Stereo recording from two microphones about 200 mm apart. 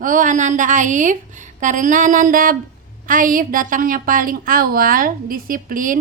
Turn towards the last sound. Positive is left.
turn(degrees=-45)  # may be behind; listen again after turning